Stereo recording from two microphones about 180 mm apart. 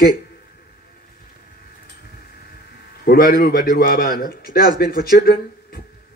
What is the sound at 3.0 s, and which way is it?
A man's voice, 55° left (ahead or behind).